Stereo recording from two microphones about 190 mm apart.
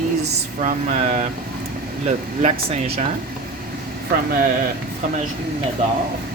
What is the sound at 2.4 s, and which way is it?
Speech, 30° right (ahead or behind).